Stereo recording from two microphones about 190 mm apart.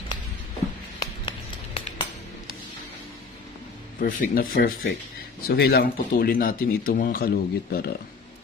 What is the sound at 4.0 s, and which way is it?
Speech, 45° left (ahead or behind).